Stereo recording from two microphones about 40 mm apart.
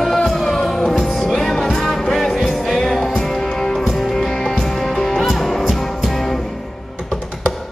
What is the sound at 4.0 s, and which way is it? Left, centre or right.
Music, centre.